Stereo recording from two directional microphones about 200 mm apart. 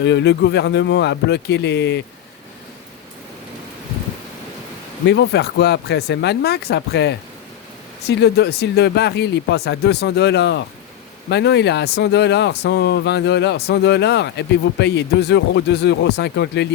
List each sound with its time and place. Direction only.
0.0 s speech: 60° left (ahead or behind)
5.0 s speech: 60° left (ahead or behind)